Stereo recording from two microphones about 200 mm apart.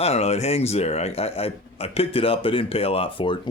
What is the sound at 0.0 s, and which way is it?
Speech, 30° left (ahead or behind).